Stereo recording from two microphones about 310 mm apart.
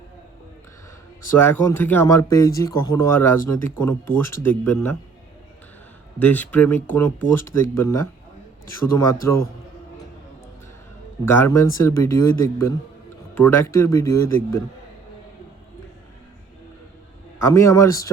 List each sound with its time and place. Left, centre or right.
1.4 s speech: centre
6.1 s speech: centre
9.2 s speech: centre
11.3 s speech: centre
17.4 s speech: centre